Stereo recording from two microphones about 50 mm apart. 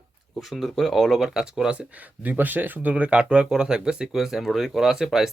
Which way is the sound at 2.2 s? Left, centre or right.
Right.